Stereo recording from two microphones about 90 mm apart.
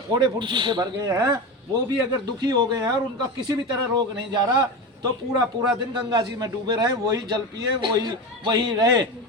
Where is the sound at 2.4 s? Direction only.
50° right (ahead or behind).